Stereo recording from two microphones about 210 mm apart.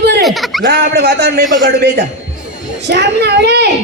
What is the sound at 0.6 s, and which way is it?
Speech, 50° right (ahead or behind).